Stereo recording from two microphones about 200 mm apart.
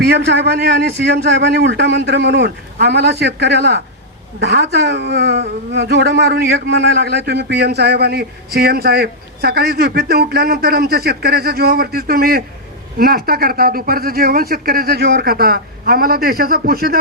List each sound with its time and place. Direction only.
0.0 s a man's voice: 55° right (ahead or behind)